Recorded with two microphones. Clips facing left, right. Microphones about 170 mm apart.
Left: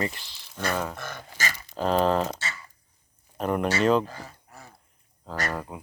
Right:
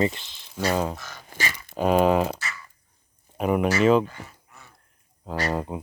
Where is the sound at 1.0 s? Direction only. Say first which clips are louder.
Left 5 dB; 55° left (ahead or behind).